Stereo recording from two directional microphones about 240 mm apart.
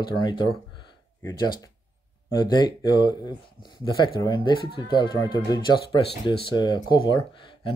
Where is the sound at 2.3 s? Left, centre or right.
Centre.